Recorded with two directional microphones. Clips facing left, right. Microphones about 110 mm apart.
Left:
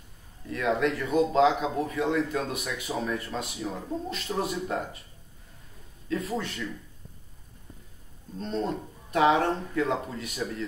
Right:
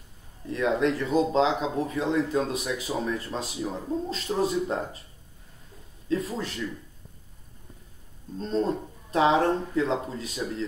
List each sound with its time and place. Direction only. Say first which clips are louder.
0.5 s speech: right 2 dB; 30° right (ahead or behind)
6.0 s speech: right 2 dB; 30° right (ahead or behind)
8.4 s speech: right 3 dB; 35° right (ahead or behind)